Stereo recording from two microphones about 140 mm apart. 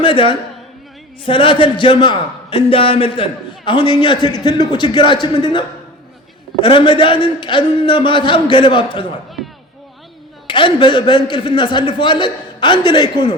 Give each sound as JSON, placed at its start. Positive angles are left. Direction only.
{"t": 0.0, "sound": "a man's voice", "side_deg": 40}
{"t": 10.4, "sound": "a man's voice", "side_deg": 35}